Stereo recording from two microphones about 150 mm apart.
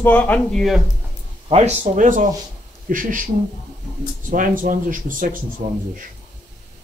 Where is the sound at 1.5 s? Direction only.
50° right (ahead or behind).